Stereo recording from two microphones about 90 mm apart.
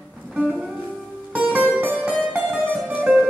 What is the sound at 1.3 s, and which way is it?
Music, 15° right (ahead or behind).